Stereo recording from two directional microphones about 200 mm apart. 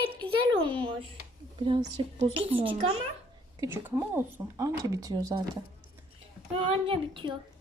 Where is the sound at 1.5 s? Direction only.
25° right (ahead or behind).